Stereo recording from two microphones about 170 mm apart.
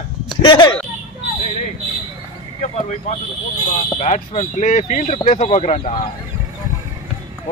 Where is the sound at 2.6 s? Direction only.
40° left (ahead or behind).